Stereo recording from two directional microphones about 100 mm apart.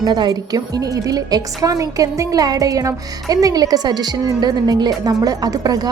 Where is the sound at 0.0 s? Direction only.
45° right (ahead or behind).